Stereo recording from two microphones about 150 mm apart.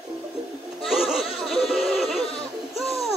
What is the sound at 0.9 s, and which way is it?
Music, centre (ahead or behind).